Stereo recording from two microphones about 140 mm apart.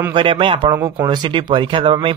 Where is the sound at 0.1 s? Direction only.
35° right (ahead or behind).